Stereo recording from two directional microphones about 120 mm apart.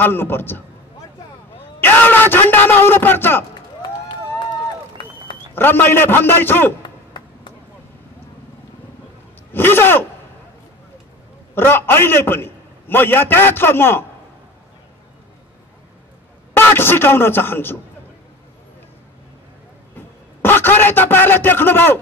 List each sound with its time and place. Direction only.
0.0 s a man's voice: 20° left (ahead or behind)
1.8 s speech: 15° left (ahead or behind)
5.5 s a man's voice: 20° left (ahead or behind)
6.8 s a sound: 40° left (ahead or behind)
9.5 s speech: 15° left (ahead or behind)
11.5 s a man's voice: 20° left (ahead or behind)
16.5 s a man's voice: 20° left (ahead or behind)
20.4 s speech: 15° left (ahead or behind)